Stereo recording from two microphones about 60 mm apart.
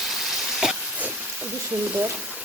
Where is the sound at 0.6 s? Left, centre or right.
Centre.